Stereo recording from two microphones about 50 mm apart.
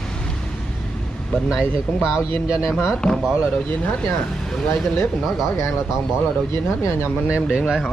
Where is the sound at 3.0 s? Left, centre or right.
Centre.